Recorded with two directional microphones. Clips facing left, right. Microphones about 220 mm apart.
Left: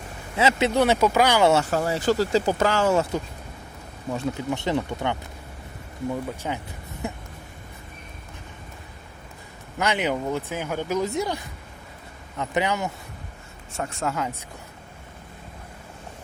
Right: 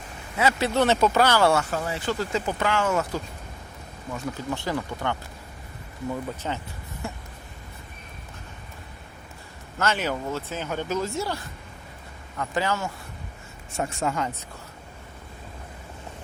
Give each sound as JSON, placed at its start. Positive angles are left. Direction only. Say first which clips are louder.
{"t": 0.3, "sound": "speech", "louder": "left 2 dB", "side_deg": 20}
{"t": 1.7, "sound": "speech", "louder": "left 6 dB", "side_deg": 40}
{"t": 4.4, "sound": "speech", "louder": "left 1 dB", "side_deg": 20}
{"t": 6.1, "sound": "speech", "louder": "left 1 dB", "side_deg": 10}
{"t": 9.7, "sound": "speech", "louder": "left 2 dB", "side_deg": 15}
{"t": 13.7, "sound": "speech", "louder": "right 1 dB", "side_deg": 0}